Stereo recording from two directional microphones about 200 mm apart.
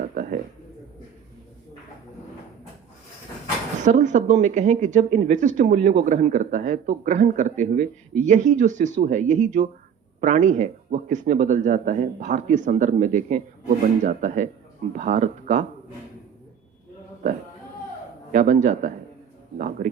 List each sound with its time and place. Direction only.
0.1 s a sound: 40° right (ahead or behind)
3.8 s speech: 40° right (ahead or behind)
18.3 s speech: 40° right (ahead or behind)